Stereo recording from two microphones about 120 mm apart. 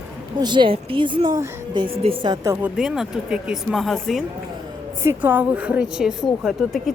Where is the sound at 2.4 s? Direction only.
20° right (ahead or behind).